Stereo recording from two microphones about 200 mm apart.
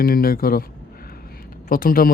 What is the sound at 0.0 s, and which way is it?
Speech, 45° left (ahead or behind).